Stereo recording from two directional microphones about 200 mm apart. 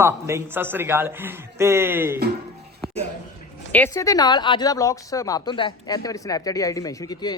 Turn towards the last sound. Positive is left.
turn(degrees=20)  # may be behind; listen again after turning